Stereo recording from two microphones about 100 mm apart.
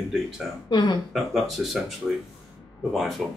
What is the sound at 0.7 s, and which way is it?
Speech, 45° left (ahead or behind).